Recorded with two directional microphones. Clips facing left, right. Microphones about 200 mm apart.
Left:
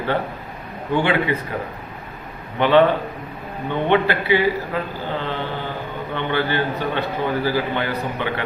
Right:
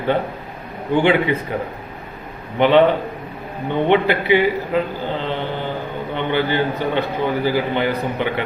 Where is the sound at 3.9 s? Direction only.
15° right (ahead or behind).